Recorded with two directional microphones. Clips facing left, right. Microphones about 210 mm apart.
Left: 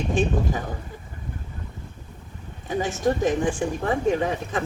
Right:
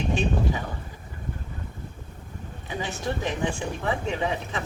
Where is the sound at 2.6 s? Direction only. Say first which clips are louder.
Left 7 dB; 45° left (ahead or behind).